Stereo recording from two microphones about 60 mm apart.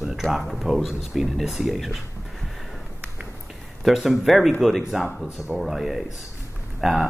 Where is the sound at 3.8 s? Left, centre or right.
Centre.